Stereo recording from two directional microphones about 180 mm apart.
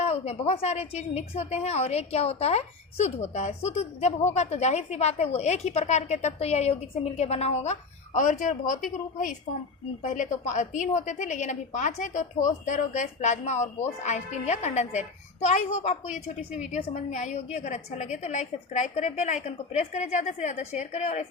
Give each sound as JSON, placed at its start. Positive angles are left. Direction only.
{"t": 0.0, "sound": "a woman's voice", "side_deg": 35}
{"t": 10.0, "sound": "a woman's voice", "side_deg": 40}